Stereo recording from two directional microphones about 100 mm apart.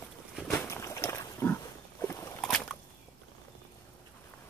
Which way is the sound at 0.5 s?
30° left (ahead or behind).